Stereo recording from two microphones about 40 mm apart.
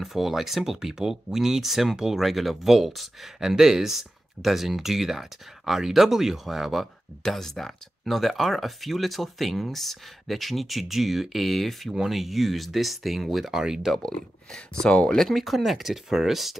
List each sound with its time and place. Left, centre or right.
0.0 s speech: centre
11.9 s speech: centre
13.9 s speech: centre
15.1 s speech: centre